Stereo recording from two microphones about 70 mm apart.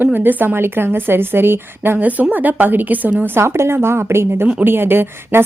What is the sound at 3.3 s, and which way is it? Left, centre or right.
A woman's voice, right.